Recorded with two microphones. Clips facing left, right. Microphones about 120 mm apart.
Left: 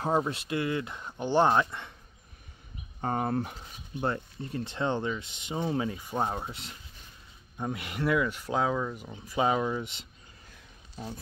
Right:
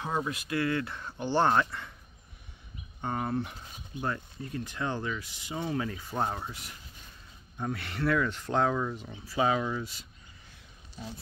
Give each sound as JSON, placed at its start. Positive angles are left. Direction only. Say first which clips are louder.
{"t": 0.0, "sound": "speech", "louder": "left 5 dB", "side_deg": 30}
{"t": 3.0, "sound": "speech", "louder": "left 2 dB", "side_deg": 35}
{"t": 4.0, "sound": "speech", "louder": "left 3 dB", "side_deg": 30}
{"t": 9.1, "sound": "speech", "louder": "left 1 dB", "side_deg": 20}